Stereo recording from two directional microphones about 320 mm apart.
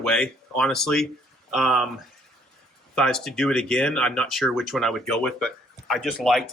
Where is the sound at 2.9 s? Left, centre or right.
Centre.